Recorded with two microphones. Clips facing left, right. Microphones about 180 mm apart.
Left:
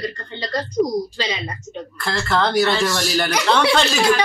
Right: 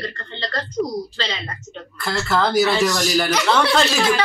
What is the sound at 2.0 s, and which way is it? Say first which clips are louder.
Speech: even; 5° right (ahead or behind).